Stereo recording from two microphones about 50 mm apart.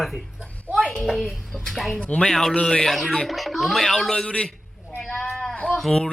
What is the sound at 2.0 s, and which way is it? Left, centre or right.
Speech, left.